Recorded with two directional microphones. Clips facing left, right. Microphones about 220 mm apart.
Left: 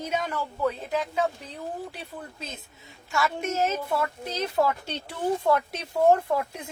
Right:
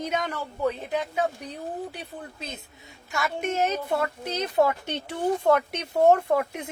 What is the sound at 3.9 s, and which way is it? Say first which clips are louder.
Speech: right 2 dB; 20° right (ahead or behind).